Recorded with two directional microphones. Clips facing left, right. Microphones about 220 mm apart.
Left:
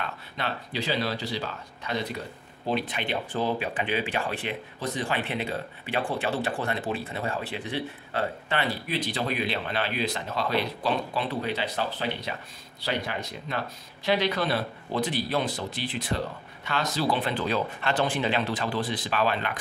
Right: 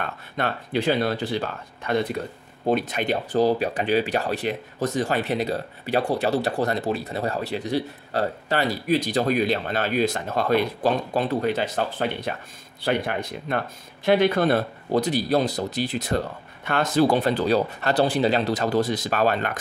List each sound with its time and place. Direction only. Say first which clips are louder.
0.0 s speech: right 5 dB; 50° right (ahead or behind)
16.6 s speech: right 7 dB; 55° right (ahead or behind)